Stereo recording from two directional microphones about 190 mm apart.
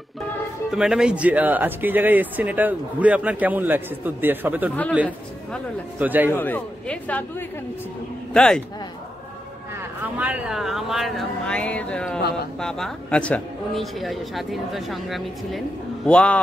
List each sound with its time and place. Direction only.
0.7 s speech: 5° right (ahead or behind)
5.9 s speech: 10° right (ahead or behind)
6.3 s speech: 10° left (ahead or behind)
9.8 s speech: 10° right (ahead or behind)